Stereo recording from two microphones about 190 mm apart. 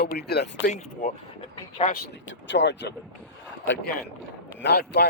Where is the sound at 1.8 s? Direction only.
30° left (ahead or behind).